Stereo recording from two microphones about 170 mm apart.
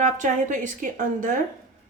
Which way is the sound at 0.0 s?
50° right (ahead or behind).